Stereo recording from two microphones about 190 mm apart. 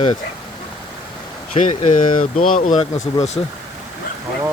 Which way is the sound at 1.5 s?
35° left (ahead or behind).